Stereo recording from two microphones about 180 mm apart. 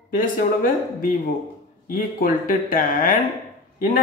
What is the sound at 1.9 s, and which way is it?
Speech, 50° left (ahead or behind).